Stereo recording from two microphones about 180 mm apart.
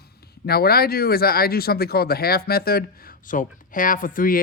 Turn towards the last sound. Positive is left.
turn(degrees=50)  # may be behind; listen again after turning